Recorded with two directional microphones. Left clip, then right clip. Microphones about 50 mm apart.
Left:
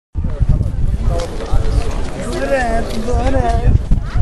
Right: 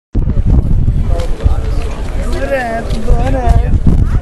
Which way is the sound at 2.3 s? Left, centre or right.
Right.